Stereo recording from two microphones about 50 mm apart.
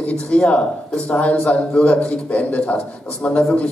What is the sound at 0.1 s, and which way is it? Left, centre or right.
A man's voice, left.